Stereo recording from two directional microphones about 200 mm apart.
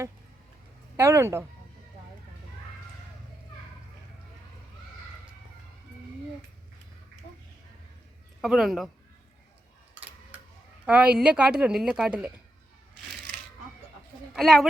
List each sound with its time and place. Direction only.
0.9 s speech: 15° right (ahead or behind)
8.4 s speech: centre (ahead or behind)
10.8 s speech: 5° right (ahead or behind)
14.3 s speech: centre (ahead or behind)